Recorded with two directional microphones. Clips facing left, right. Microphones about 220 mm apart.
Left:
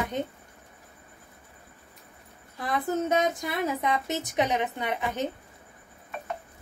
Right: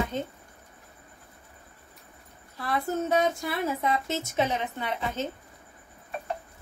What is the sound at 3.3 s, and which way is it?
A woman's voice, 15° left (ahead or behind).